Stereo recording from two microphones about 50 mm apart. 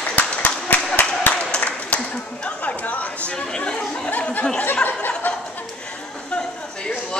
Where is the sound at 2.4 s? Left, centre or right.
Left.